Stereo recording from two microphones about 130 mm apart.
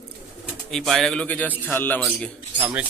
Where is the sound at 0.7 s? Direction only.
5° left (ahead or behind).